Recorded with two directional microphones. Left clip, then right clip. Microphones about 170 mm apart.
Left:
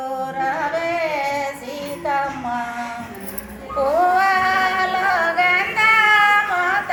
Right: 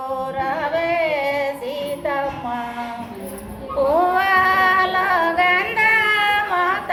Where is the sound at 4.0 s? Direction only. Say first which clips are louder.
Left 2 dB; 5° right (ahead or behind).